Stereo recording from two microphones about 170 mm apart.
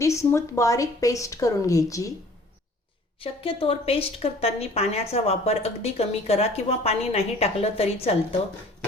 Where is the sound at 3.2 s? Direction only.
30° left (ahead or behind).